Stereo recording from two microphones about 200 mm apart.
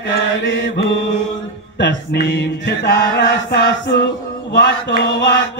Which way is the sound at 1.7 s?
60° left (ahead or behind).